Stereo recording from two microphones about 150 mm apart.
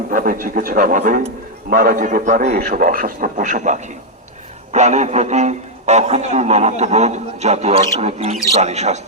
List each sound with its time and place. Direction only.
0.1 s a man's voice: 65° right (ahead or behind)
2.6 s a man's voice: 65° right (ahead or behind); by 9.0 s 50° right (ahead or behind)